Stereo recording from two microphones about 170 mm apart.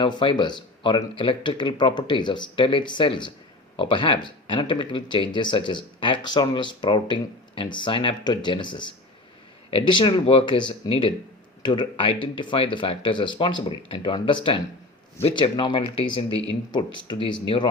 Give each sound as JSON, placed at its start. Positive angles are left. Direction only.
{"t": 0.0, "sound": "speech", "side_deg": 30}